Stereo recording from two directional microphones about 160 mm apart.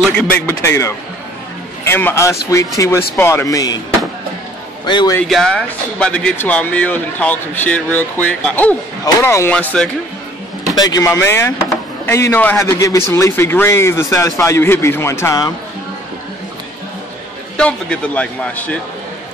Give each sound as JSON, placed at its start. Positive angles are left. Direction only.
{"t": 0.1, "sound": "a man's voice", "side_deg": 10}
{"t": 4.8, "sound": "a man's voice", "side_deg": 30}
{"t": 5.3, "sound": "speech", "side_deg": 5}
{"t": 10.7, "sound": "speech", "side_deg": 25}
{"t": 17.6, "sound": "speech", "side_deg": 5}